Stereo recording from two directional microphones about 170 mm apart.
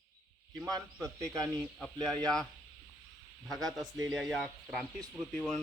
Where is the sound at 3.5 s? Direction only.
Centre (ahead or behind).